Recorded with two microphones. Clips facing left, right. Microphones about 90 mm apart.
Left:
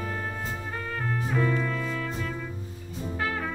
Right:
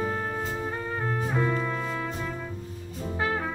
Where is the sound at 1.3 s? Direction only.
20° right (ahead or behind).